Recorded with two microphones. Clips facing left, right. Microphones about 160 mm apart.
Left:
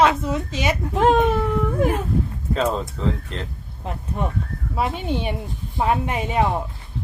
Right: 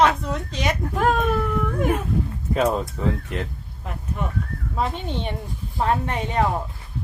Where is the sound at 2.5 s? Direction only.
10° right (ahead or behind).